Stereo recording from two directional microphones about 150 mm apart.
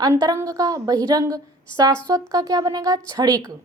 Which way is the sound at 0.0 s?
25° right (ahead or behind).